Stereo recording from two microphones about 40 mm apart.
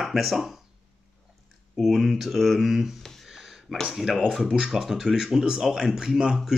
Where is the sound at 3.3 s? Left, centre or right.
Centre.